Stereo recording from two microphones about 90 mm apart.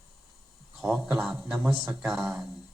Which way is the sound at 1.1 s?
Centre (ahead or behind).